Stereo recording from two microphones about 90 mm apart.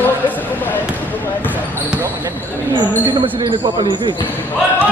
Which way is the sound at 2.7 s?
65° right (ahead or behind).